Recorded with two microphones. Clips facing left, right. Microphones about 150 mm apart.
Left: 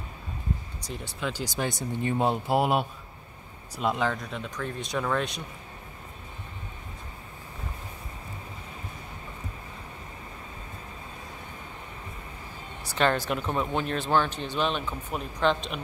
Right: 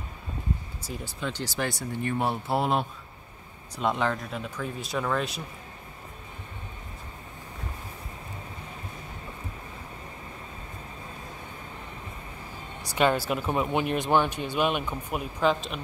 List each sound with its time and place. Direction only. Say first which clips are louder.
0.8 s speech: even; centre (ahead or behind)
1.3 s speech: right 1 dB; 15° left (ahead or behind); by 5.4 s centre (ahead or behind)
12.8 s speech: right 1 dB; 10° right (ahead or behind)